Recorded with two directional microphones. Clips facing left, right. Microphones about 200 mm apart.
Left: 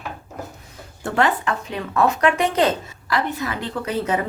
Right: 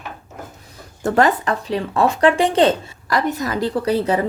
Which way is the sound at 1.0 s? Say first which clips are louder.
Right 4 dB; 40° right (ahead or behind).